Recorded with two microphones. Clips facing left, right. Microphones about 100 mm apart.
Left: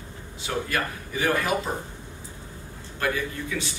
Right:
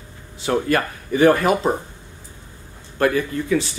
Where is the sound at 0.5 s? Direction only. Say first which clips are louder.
Right 8 dB; 50° right (ahead or behind).